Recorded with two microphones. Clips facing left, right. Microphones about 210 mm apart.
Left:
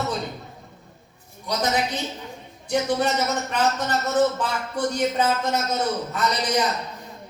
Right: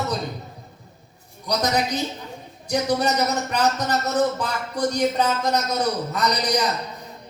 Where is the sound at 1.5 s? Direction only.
40° right (ahead or behind).